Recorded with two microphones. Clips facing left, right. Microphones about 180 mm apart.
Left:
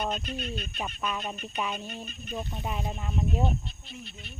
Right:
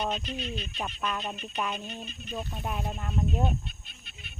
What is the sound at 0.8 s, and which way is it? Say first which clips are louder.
Speech: even; 5° left (ahead or behind).